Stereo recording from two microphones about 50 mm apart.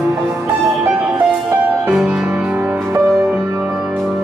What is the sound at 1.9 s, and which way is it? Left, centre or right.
Music, centre.